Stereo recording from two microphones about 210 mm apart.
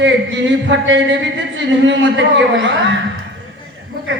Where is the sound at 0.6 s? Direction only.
60° right (ahead or behind).